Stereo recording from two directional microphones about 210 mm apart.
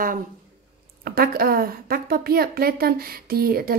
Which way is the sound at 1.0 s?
45° right (ahead or behind).